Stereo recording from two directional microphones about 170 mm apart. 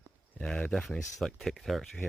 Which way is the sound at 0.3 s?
5° left (ahead or behind).